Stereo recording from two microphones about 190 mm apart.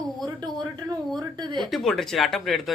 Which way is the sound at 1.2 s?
20° right (ahead or behind).